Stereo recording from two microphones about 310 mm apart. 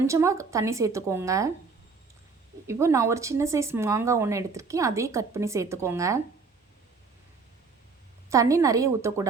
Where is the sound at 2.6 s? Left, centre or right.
Centre.